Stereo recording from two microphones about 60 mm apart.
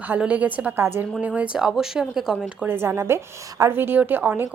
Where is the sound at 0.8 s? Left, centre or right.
Right.